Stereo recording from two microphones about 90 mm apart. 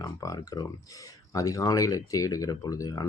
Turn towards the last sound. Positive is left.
turn(degrees=40)  # may be behind; listen again after turning